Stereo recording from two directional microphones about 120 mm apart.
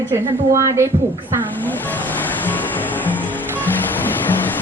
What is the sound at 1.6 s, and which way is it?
Music, 15° left (ahead or behind).